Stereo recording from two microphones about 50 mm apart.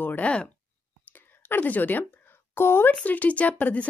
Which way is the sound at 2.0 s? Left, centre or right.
Left.